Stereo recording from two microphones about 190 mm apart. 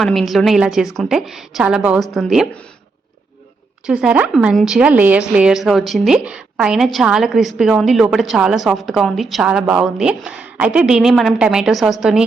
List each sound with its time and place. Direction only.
0.0 s a woman's voice: centre (ahead or behind)
3.8 s a woman's voice: 5° right (ahead or behind)